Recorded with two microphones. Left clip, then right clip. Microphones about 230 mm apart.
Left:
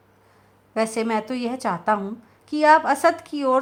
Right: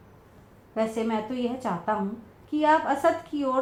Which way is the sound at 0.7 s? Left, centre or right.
Left.